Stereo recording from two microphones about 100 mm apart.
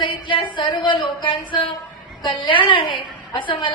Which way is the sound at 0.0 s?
55° left (ahead or behind).